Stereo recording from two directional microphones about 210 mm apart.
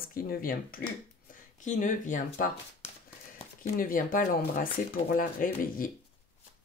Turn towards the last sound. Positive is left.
turn(degrees=40)  # may be behind; listen again after turning